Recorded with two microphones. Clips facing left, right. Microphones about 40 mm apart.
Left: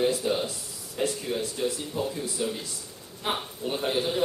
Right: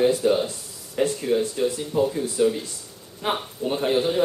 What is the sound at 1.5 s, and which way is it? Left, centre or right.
Speech, centre.